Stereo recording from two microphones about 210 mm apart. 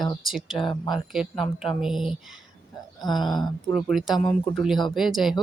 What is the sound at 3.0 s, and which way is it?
Speech, 20° left (ahead or behind).